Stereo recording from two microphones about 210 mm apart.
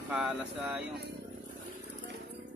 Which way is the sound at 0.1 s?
5° right (ahead or behind).